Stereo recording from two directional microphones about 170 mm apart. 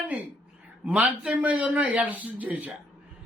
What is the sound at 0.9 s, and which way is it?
Speech, 5° right (ahead or behind).